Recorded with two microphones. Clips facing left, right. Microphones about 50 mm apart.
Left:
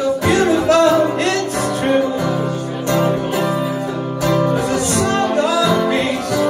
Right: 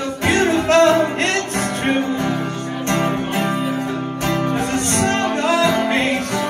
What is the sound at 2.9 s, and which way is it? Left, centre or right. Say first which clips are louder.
Music: left 3 dB; right.